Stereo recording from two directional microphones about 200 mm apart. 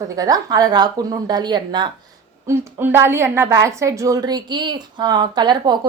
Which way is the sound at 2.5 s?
10° right (ahead or behind).